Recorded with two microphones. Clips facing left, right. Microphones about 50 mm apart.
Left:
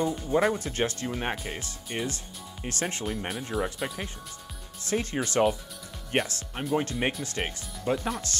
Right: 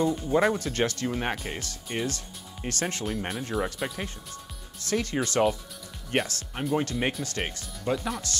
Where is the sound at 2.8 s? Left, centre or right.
Left.